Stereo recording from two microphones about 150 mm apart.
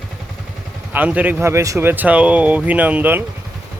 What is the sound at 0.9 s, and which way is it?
Speech, 10° right (ahead or behind).